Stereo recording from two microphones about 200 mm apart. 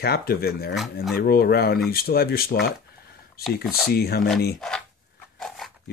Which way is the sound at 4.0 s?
50° left (ahead or behind).